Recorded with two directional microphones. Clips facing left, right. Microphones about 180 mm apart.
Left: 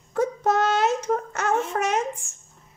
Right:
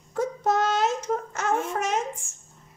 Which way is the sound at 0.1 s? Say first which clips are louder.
Left 2 dB; 65° left (ahead or behind).